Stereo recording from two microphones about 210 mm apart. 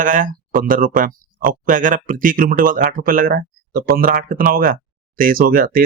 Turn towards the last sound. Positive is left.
turn(degrees=-45)  # may be behind; listen again after turning